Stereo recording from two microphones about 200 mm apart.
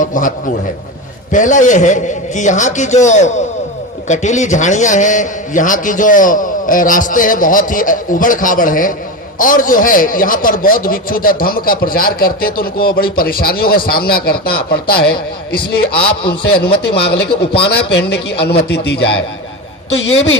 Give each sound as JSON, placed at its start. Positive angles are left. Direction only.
{"t": 0.0, "sound": "a man's voice", "side_deg": 40}
{"t": 20.1, "sound": "a woman's voice", "side_deg": 75}